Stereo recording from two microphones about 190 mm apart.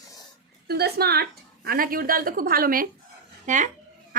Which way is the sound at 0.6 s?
55° right (ahead or behind).